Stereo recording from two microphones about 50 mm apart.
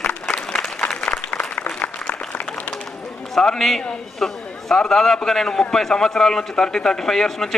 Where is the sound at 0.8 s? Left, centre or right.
Centre.